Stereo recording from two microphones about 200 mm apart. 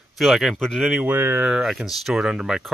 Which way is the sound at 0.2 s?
Centre (ahead or behind).